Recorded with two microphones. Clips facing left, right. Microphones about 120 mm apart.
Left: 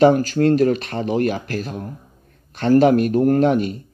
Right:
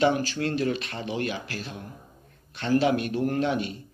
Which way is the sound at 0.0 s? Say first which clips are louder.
Left 10 dB; 45° left (ahead or behind).